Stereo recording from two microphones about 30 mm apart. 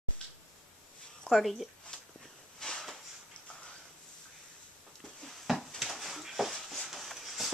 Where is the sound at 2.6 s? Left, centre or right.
Left.